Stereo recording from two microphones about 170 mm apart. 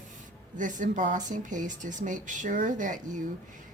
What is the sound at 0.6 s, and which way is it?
A woman's voice, 50° right (ahead or behind).